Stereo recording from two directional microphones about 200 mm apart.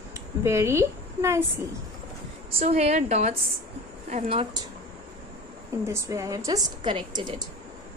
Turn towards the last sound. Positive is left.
turn(degrees=-25)  # may be behind; listen again after turning